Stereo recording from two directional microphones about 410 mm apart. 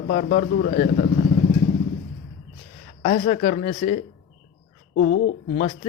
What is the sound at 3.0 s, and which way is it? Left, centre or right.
A man's voice, centre.